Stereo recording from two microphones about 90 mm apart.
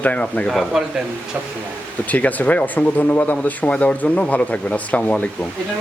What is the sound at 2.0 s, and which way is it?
Speech, 15° left (ahead or behind).